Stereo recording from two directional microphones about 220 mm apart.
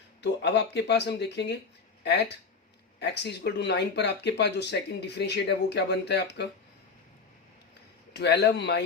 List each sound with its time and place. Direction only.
0.2 s speech: 50° left (ahead or behind)
8.1 s speech: 50° left (ahead or behind)